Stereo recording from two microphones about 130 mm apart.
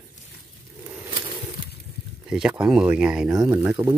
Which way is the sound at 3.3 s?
25° right (ahead or behind).